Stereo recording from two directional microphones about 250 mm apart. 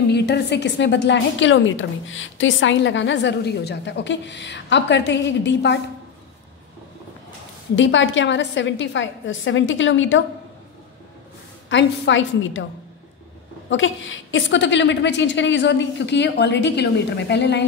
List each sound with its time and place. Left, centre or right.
0.1 s a woman's voice: left
7.7 s a woman's voice: left
11.7 s a woman's voice: left
13.7 s a woman's voice: left